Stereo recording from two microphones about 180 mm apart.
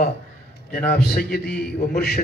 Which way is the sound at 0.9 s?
60° left (ahead or behind).